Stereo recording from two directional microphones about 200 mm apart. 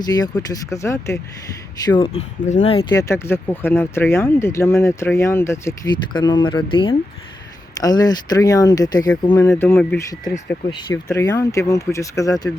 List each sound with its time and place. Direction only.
0.0 s speech: 20° left (ahead or behind)
1.8 s speech: 25° left (ahead or behind)
2.9 s speech: 15° left (ahead or behind)